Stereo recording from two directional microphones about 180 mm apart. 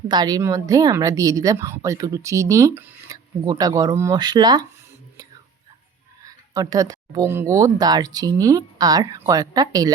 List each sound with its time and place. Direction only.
0.1 s a woman's voice: 20° right (ahead or behind)
6.2 s a woman's voice: 20° right (ahead or behind)